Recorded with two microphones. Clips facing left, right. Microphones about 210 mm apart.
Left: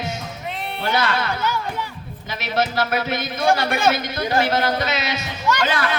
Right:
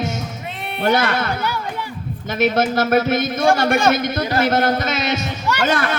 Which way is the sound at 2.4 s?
50° right (ahead or behind).